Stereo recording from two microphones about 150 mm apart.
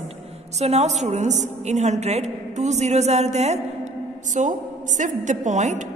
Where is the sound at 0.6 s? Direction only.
45° right (ahead or behind).